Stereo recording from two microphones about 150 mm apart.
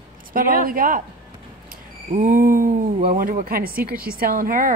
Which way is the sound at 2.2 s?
70° right (ahead or behind).